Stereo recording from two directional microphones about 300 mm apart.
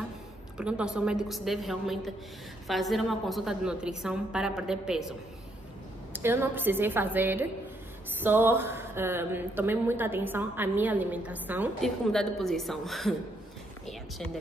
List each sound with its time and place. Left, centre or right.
0.6 s a woman's voice: centre
6.1 s a woman's voice: centre
13.8 s a sound: centre